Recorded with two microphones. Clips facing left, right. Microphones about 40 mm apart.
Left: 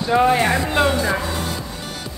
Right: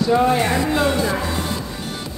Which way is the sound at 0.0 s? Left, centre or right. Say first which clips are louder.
Even; left.